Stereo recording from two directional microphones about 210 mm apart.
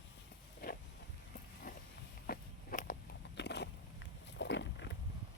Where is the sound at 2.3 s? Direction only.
40° left (ahead or behind).